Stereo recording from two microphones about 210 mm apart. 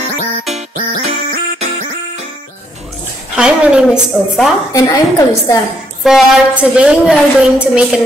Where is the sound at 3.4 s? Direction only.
5° right (ahead or behind).